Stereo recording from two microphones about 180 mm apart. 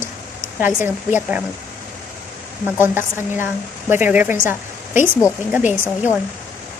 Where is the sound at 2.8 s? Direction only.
10° right (ahead or behind).